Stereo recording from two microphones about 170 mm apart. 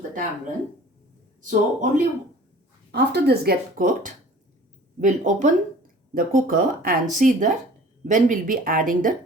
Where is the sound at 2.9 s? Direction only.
80° right.